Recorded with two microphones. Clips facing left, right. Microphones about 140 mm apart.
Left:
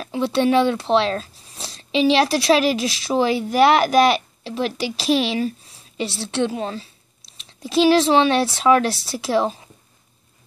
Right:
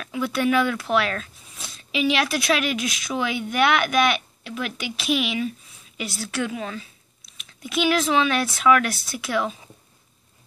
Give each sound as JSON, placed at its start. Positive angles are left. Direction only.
{"t": 0.0, "sound": "speech", "side_deg": 30}